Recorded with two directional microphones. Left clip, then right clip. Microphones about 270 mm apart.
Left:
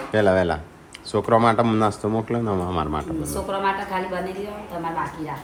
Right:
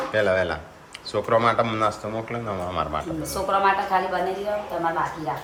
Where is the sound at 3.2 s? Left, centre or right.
Right.